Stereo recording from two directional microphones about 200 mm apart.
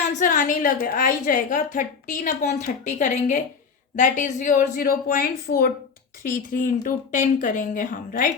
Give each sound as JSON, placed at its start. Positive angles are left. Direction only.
{"t": 0.2, "sound": "a woman's voice", "side_deg": 40}